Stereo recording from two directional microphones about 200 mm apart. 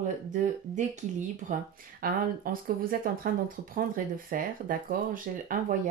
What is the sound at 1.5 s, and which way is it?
A woman's voice, 45° right (ahead or behind).